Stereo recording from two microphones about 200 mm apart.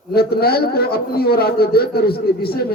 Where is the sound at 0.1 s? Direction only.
50° left (ahead or behind).